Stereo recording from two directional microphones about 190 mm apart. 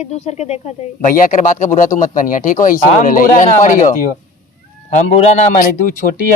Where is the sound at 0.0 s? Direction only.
35° left (ahead or behind).